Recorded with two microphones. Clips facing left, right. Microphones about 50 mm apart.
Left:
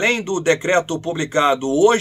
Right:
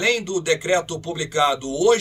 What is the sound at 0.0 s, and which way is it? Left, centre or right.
Speech, left.